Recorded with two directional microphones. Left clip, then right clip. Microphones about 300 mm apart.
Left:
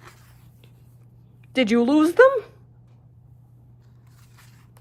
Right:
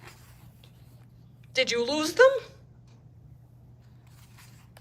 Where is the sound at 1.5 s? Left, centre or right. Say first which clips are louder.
Left 6 dB; centre.